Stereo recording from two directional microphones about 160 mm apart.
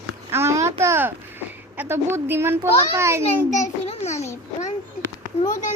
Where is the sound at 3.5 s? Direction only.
50° left (ahead or behind).